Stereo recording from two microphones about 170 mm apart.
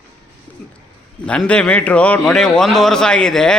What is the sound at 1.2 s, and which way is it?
A man's voice, 5° left (ahead or behind).